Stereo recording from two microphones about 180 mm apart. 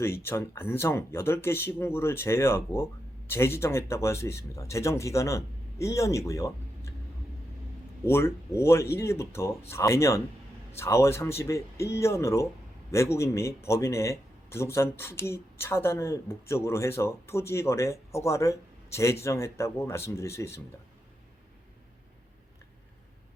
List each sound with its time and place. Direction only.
0.0 s speech: 15° left (ahead or behind)
8.0 s speech: 15° left (ahead or behind)